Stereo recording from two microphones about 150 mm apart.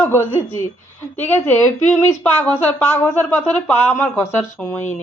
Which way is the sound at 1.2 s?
15° left (ahead or behind).